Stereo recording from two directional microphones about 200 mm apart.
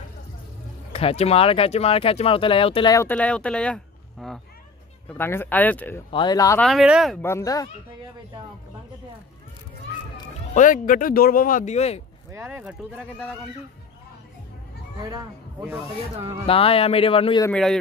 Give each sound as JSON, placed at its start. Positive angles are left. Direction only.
{"t": 0.9, "sound": "speech", "side_deg": 30}
{"t": 6.1, "sound": "speech", "side_deg": 20}
{"t": 6.6, "sound": "speech", "side_deg": 0}
{"t": 7.2, "sound": "speech", "side_deg": 15}
{"t": 10.5, "sound": "speech", "side_deg": 40}
{"t": 12.3, "sound": "speech", "side_deg": -10}
{"t": 16.4, "sound": "speech", "side_deg": 30}
{"t": 17.5, "sound": "speech", "side_deg": 5}